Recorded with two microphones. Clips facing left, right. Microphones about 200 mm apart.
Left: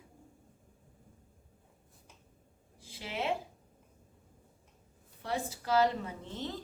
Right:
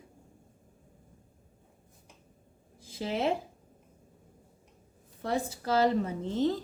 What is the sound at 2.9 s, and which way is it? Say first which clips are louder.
Speech: right 7 dB; 40° right (ahead or behind).